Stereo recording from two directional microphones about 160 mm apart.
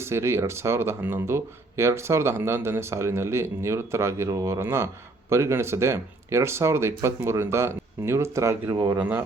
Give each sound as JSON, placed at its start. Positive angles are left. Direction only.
{"t": 0.0, "sound": "speech", "side_deg": -15}